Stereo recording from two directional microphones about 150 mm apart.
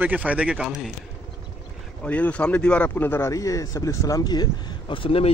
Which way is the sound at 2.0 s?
10° left (ahead or behind).